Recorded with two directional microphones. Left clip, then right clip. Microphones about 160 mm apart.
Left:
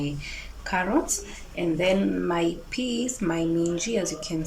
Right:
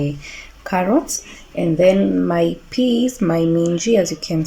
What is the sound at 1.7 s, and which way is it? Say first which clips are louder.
Speech: right 11 dB; 50° right (ahead or behind).